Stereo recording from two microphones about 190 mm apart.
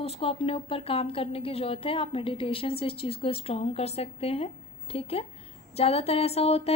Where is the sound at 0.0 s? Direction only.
30° left (ahead or behind).